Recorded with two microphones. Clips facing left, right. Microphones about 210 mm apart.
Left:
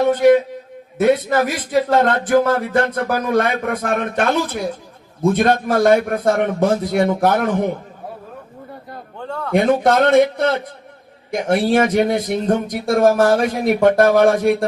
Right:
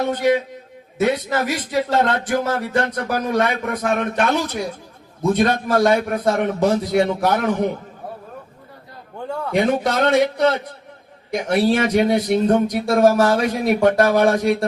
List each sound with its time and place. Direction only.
0.0 s speech: 50° left (ahead or behind)
9.2 s a man's voice: 10° right (ahead or behind)
9.5 s speech: 55° left (ahead or behind)